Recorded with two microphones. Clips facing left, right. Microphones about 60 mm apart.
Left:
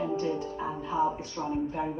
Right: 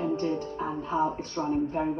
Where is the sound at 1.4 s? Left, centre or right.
Centre.